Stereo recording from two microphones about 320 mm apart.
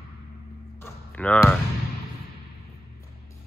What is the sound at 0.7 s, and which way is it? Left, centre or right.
Basketball bounce, centre.